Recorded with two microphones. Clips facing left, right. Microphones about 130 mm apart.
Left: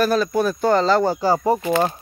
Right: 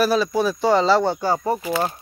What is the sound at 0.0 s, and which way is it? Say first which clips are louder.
Speech: even; 5° right (ahead or behind).